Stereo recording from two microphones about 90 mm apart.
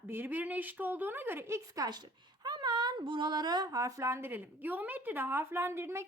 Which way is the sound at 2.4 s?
50° right (ahead or behind).